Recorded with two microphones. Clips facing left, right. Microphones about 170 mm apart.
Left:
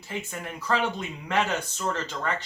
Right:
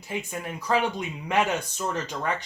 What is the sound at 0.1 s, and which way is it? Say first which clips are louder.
Speech: right 2 dB; 15° right (ahead or behind).